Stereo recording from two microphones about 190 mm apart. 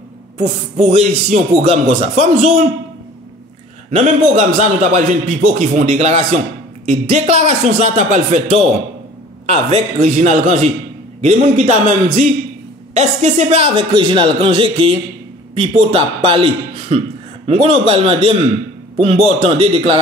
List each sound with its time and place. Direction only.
0.4 s speech: 35° right (ahead or behind)
3.9 s a man's voice: 40° right (ahead or behind)